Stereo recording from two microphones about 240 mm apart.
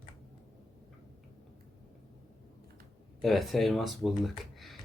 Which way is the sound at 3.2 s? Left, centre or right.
Centre.